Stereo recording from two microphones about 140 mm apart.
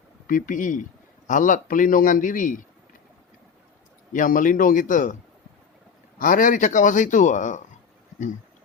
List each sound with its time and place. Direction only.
0.3 s a man's voice: 75° left (ahead or behind)
4.1 s a man's voice: 75° left (ahead or behind)
6.1 s a man's voice: 75° left (ahead or behind); by 7.6 s 60° left (ahead or behind)